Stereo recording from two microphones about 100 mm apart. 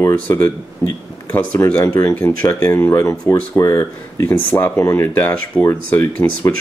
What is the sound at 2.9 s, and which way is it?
Speech, 30° left (ahead or behind).